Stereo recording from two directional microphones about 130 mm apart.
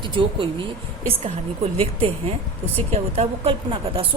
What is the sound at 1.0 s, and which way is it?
A woman's voice, 45° right (ahead or behind).